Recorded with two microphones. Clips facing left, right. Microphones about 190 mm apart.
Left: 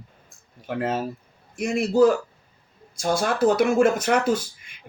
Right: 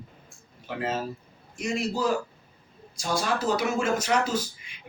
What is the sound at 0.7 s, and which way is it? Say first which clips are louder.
Speech: left 4 dB; 50° left (ahead or behind).